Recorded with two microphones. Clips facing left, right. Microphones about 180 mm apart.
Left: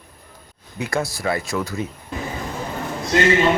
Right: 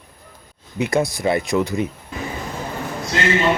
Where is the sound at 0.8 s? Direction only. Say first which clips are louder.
Right 5 dB; 20° right (ahead or behind).